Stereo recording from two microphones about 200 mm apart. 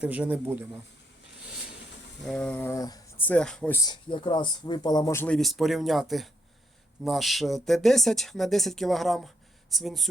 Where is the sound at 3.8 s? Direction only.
25° left (ahead or behind).